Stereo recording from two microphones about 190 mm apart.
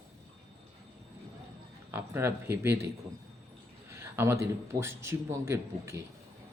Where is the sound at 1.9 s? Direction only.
10° right (ahead or behind).